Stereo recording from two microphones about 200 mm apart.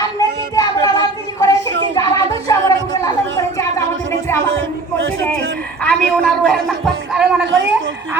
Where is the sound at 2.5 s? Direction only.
15° left (ahead or behind).